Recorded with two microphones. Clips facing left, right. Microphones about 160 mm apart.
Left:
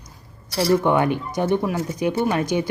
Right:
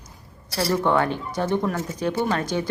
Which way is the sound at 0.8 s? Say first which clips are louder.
Left 2 dB; 15° left (ahead or behind).